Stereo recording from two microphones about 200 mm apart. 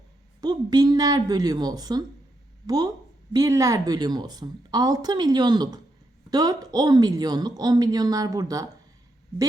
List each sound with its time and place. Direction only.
0.4 s a woman's voice: 20° right (ahead or behind)